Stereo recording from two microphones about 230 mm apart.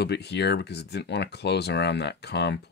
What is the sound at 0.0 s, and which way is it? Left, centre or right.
Speech, left.